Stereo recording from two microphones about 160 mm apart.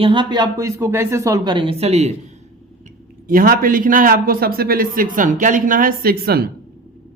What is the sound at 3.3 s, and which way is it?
A man's voice, 65° right (ahead or behind).